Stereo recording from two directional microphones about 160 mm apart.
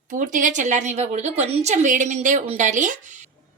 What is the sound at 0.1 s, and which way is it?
A woman's voice, 50° right (ahead or behind).